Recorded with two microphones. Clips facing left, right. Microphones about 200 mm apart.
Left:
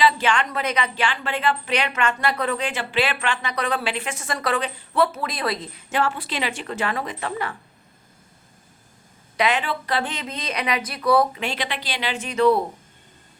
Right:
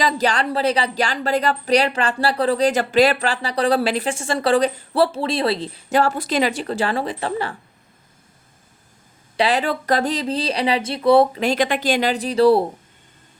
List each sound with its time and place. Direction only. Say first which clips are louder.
0.0 s speech: right 1 dB; 40° right (ahead or behind)
9.4 s speech: right 3 dB; 35° right (ahead or behind)
11.3 s speech: right 9 dB; 40° right (ahead or behind)